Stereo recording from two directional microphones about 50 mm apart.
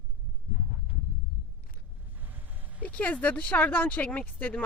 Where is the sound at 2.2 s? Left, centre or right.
Right.